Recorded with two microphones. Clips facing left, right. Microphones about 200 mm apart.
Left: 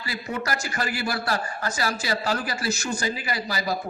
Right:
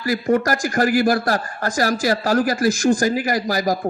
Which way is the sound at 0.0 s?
50° right (ahead or behind).